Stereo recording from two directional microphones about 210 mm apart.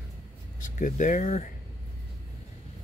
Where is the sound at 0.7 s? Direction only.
40° left (ahead or behind).